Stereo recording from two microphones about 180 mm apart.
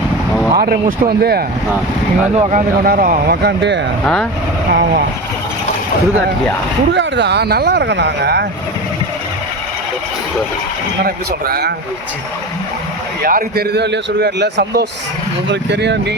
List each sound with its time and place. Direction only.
0.6 s speech: 55° right (ahead or behind)
2.3 s speech: 30° right (ahead or behind)
2.8 s speech: 50° right (ahead or behind); by 3.8 s 70° right (ahead or behind)
4.0 s speech: 5° left (ahead or behind)
4.7 s speech: 60° right (ahead or behind)
6.9 s a man's voice: 75° right (ahead or behind)
11.0 s speech: 60° right (ahead or behind)
13.2 s a man's voice: 55° right (ahead or behind); by 16.1 s 70° right (ahead or behind)